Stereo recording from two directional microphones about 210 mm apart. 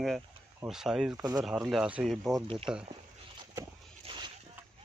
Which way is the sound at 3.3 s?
20° right (ahead or behind).